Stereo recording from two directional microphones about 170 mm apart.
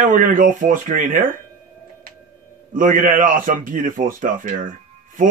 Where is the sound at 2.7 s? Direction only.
50° right (ahead or behind).